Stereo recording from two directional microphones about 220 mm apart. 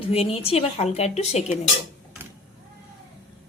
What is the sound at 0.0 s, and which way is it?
A woman's voice, 25° left (ahead or behind).